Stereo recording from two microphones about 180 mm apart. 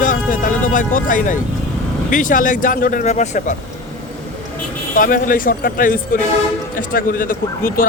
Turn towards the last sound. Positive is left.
turn(degrees=50)  # may be behind; listen again after turning